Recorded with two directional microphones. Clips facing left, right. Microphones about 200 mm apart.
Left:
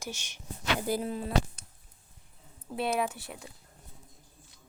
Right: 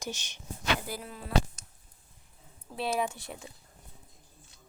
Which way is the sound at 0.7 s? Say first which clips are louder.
Left 9 dB; 25° left (ahead or behind).